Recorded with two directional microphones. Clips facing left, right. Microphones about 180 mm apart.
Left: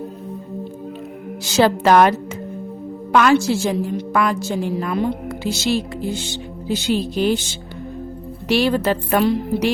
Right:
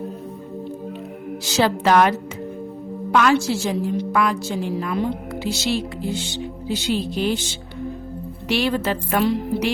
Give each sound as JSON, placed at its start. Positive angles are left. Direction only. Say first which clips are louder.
{"t": 1.5, "sound": "a woman's voice", "louder": "left 4 dB", "side_deg": 50}
{"t": 8.4, "sound": "speech", "louder": "left 4 dB", "side_deg": 40}